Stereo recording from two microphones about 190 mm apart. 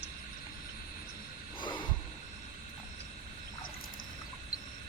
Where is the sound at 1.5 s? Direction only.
25° left (ahead or behind).